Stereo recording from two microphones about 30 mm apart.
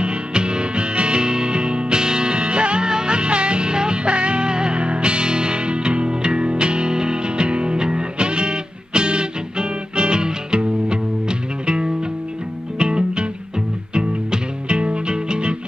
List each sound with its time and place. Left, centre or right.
0.0 s music: right
14.7 s music: right